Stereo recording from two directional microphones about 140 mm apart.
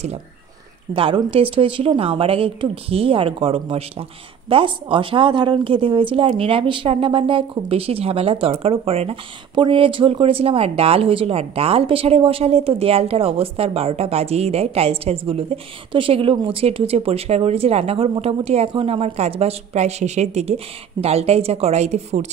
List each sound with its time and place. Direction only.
0.9 s speech: 40° right (ahead or behind)